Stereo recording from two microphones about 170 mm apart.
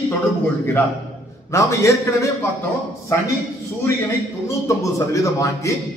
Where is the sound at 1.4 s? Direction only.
15° left (ahead or behind).